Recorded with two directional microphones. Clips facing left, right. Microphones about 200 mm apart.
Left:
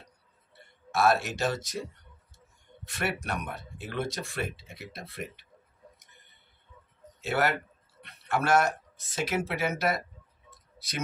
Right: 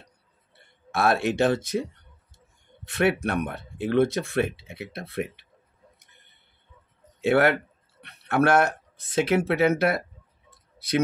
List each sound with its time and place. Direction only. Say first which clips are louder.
0.9 s speech: right 3 dB; 60° right (ahead or behind)
2.9 s speech: right 9 dB; 55° right (ahead or behind)
7.2 s speech: right 8 dB; 60° right (ahead or behind)